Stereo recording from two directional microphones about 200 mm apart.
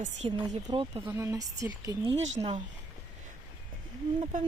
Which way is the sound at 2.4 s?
30° right (ahead or behind).